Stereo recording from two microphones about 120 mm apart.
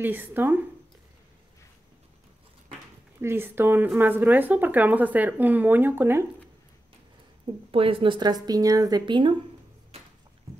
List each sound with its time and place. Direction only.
0.0 s speech: 15° right (ahead or behind)
3.2 s speech: 20° right (ahead or behind)
7.7 s speech: 50° right (ahead or behind)